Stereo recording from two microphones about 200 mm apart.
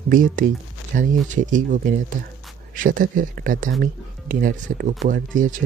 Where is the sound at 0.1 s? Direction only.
45° right (ahead or behind).